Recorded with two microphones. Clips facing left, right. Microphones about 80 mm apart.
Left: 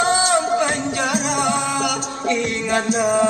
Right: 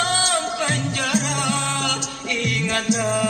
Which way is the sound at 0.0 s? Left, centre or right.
Left.